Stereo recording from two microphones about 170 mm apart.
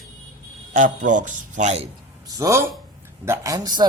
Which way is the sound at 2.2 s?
20° right (ahead or behind).